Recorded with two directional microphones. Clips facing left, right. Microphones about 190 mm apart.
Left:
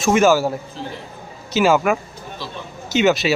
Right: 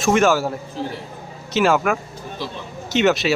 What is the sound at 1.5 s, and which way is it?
Speech, centre (ahead or behind).